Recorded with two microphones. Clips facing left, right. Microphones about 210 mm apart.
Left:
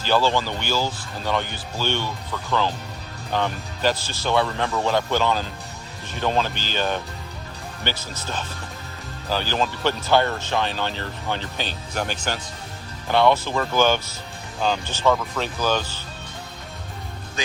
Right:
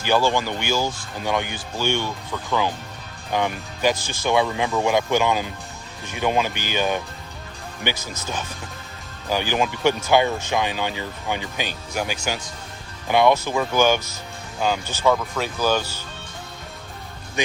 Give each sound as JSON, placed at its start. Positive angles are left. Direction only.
{"t": 0.0, "sound": "speech", "side_deg": -15}
{"t": 7.9, "sound": "speech", "side_deg": -45}
{"t": 9.3, "sound": "speech", "side_deg": -15}